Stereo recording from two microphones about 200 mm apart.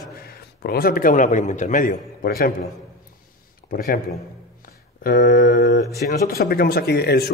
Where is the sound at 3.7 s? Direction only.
45° left (ahead or behind).